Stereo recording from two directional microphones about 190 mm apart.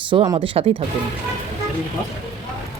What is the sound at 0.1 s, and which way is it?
Speech, 25° right (ahead or behind).